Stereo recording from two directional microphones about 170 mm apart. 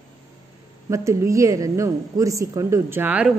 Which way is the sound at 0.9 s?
15° right (ahead or behind).